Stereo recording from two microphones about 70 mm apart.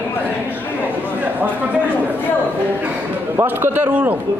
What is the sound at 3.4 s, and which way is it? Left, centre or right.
Speech, right.